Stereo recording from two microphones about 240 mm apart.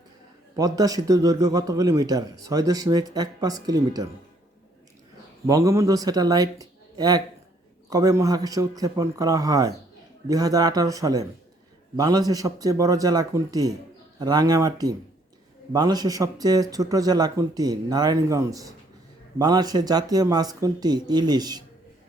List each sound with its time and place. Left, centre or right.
0.5 s a man's voice: centre
5.5 s a man's voice: centre